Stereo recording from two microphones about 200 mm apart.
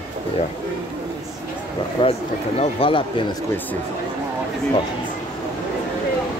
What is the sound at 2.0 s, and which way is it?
Speech, 30° left (ahead or behind).